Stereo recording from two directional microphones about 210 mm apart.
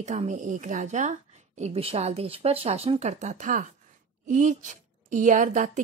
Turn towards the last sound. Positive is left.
turn(degrees=-35)  # may be behind; listen again after turning